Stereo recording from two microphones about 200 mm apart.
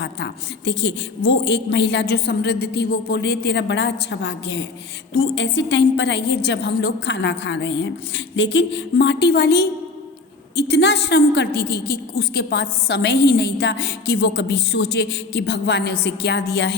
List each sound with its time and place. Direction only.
0.0 s a woman's voice: 60° left (ahead or behind)